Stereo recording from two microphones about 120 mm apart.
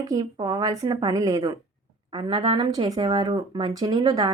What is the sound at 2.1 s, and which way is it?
A woman's voice, 45° right (ahead or behind).